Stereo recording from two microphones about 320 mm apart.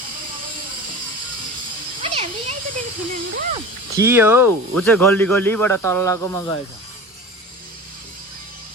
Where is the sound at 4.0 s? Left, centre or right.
Centre.